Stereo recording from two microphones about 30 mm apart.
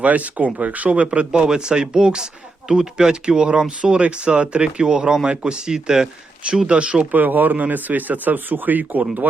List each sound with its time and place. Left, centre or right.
0.0 s speech: right
1.3 s speech: right
6.7 s speech: right
7.1 s speech: right
7.7 s speech: right